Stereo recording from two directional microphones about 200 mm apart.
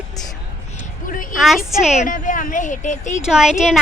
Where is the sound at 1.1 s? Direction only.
45° left (ahead or behind).